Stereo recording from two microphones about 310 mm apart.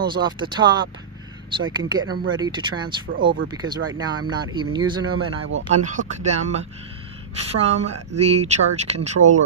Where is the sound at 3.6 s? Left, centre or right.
Right.